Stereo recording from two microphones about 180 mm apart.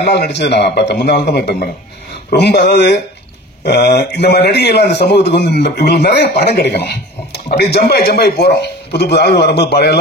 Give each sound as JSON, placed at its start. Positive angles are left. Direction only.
{"t": 0.0, "sound": "a man's voice", "side_deg": 65}